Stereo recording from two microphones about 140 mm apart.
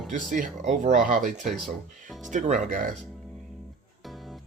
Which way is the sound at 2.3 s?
65° right (ahead or behind).